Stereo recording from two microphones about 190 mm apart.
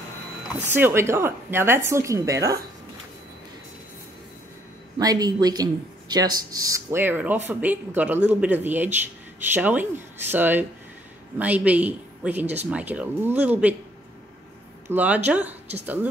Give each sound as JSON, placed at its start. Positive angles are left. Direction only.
{"t": 0.6, "sound": "speech", "side_deg": -10}
{"t": 4.9, "sound": "speech", "side_deg": -20}
{"t": 14.9, "sound": "speech", "side_deg": -10}